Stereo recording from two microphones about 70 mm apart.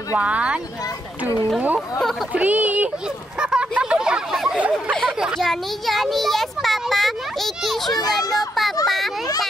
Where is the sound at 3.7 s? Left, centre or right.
Centre.